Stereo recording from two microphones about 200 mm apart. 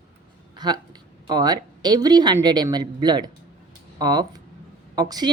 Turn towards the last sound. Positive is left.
turn(degrees=-20)  # may be behind; listen again after turning